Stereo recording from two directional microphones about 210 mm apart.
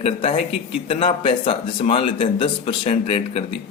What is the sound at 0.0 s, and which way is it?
A man's voice, 30° left (ahead or behind).